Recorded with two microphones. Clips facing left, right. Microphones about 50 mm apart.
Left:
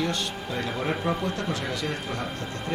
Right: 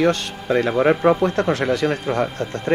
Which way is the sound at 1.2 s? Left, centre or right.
Right.